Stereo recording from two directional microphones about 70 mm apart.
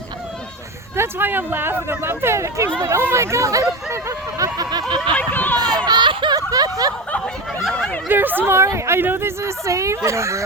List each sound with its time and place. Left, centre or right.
0.9 s speech: right
4.5 s a sound: right
5.1 s speech: left
5.5 s a sound: right
7.7 s chatter: centre
8.0 s speech: right
8.5 s speech: right